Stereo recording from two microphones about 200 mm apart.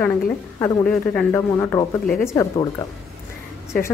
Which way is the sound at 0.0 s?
10° left (ahead or behind).